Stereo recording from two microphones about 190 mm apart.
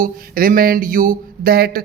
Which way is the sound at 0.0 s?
50° right (ahead or behind).